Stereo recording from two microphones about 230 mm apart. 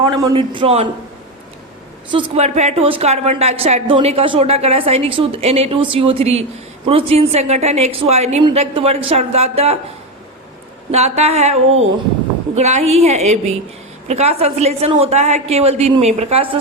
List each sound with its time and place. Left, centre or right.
0.0 s a woman's voice: centre
2.0 s a woman's voice: right
10.9 s a woman's voice: right